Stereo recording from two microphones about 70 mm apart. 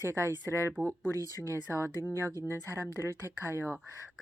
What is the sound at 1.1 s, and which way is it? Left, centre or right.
Speech, left.